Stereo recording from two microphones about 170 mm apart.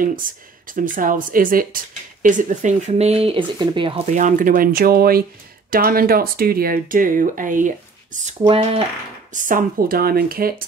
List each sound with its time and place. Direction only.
0.0 s speech: 55° right (ahead or behind); by 4.1 s 30° right (ahead or behind)
4.1 s speech: 50° right (ahead or behind)
8.4 s speech: 30° right (ahead or behind)
9.3 s speech: 50° right (ahead or behind)